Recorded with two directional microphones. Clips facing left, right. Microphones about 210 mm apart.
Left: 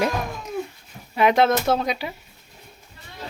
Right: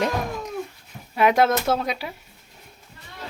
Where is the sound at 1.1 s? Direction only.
5° right (ahead or behind).